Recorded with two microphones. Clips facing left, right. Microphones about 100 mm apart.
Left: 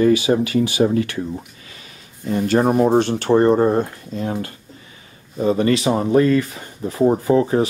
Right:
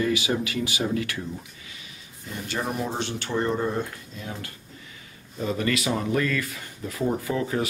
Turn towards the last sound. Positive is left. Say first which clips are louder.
# left 10 dB
turn(degrees=35)  # may be behind; listen again after turning